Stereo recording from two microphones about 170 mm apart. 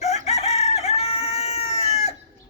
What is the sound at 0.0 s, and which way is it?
Chicken, 40° left (ahead or behind).